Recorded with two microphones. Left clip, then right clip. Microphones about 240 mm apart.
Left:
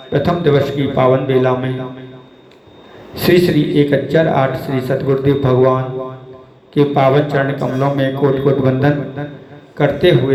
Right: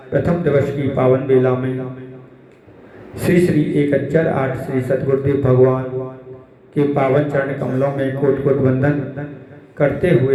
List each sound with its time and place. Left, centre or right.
0.1 s a man's voice: left
3.2 s a man's voice: left